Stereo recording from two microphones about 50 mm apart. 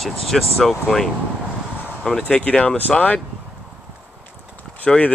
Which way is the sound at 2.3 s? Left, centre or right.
Left.